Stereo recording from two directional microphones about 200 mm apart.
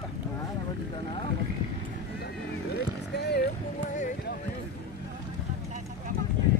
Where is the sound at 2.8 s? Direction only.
55° left (ahead or behind).